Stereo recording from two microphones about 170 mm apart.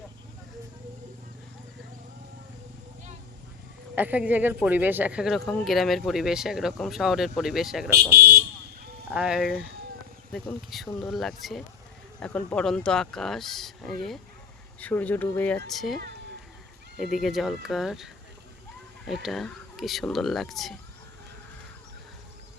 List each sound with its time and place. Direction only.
3.9 s speech: 10° right (ahead or behind)
8.2 s speech: 65° right (ahead or behind)
9.0 s speech: 5° right (ahead or behind)
11.0 s speech: centre (ahead or behind)
17.0 s speech: centre (ahead or behind)